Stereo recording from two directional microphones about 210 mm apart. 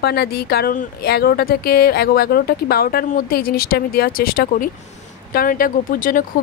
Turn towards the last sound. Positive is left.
turn(degrees=40)  # may be behind; listen again after turning